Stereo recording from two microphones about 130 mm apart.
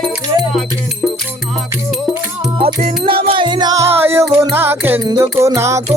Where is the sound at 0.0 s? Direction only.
Centre (ahead or behind).